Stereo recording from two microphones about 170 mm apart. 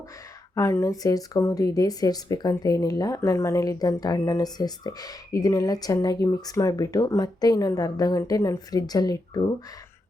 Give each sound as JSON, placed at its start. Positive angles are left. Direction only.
{"t": 0.5, "sound": "speech", "side_deg": 15}